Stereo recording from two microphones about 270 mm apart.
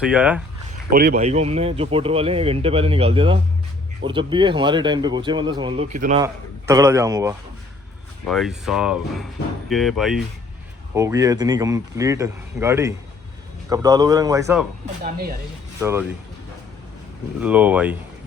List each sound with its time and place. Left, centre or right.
0.0 s speech: centre
0.9 s speech: right
6.1 s speech: centre
8.3 s speech: centre
10.9 s speech: centre
15.8 s speech: centre
17.4 s speech: centre